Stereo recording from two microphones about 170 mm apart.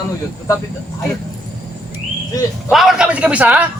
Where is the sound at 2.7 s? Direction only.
Centre (ahead or behind).